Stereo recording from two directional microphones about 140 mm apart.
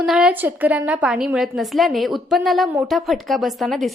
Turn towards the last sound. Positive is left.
turn(degrees=0)  # may be behind; listen again after turning